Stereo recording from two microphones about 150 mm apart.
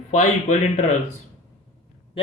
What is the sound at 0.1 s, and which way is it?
Speech, 55° left (ahead or behind).